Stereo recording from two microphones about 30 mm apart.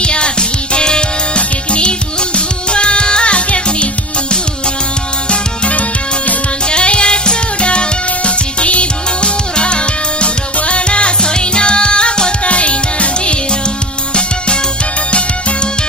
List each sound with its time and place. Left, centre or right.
0.0 s music: left
5.3 s music: left
12.5 s music: left